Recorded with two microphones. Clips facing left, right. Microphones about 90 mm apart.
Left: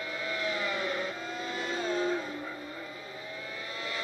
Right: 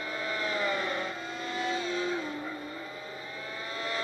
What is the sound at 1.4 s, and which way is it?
Vehicle, centre (ahead or behind).